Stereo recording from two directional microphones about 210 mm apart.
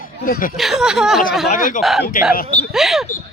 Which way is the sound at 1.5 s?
40° left (ahead or behind).